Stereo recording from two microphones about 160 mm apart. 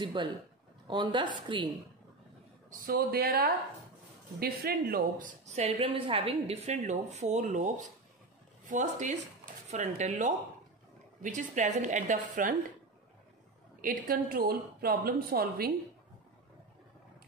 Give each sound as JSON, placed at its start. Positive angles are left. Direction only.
{"t": 0.0, "sound": "a woman's voice", "side_deg": -30}
{"t": 2.9, "sound": "a woman's voice", "side_deg": -70}
{"t": 13.7, "sound": "a woman's voice", "side_deg": -60}